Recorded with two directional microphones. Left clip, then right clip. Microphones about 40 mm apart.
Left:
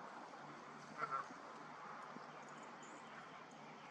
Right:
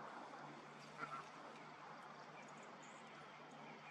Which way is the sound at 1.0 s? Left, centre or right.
Left.